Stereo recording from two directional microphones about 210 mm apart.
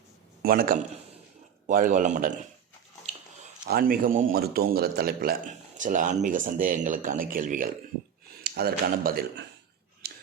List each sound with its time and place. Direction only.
0.4 s a man's voice: 45° right (ahead or behind)
3.7 s a man's voice: 45° right (ahead or behind)
10.0 s a sound: 50° right (ahead or behind)